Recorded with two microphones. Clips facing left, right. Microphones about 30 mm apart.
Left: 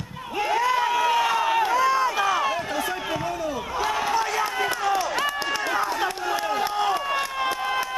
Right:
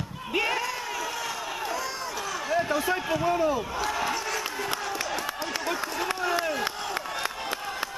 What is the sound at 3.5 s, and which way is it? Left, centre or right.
Speech, centre.